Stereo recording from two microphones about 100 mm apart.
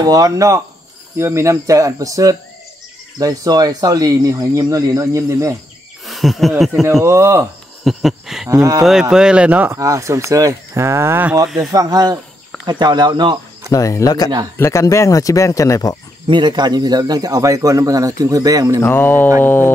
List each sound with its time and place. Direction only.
0.0 s a man's voice: 35° right (ahead or behind)
6.0 s a sound: centre (ahead or behind)
7.1 s speech: 30° right (ahead or behind)
7.8 s a sound: centre (ahead or behind)
8.5 s a man's voice: 35° right (ahead or behind)
9.1 s a man's voice: 10° right (ahead or behind)
9.8 s speech: 30° right (ahead or behind)
11.4 s a sound: centre (ahead or behind)
11.7 s a man's voice: 40° right (ahead or behind)
13.7 s speech: 35° left (ahead or behind)
16.3 s a man's voice: 50° right (ahead or behind)
18.8 s a sound: 20° left (ahead or behind)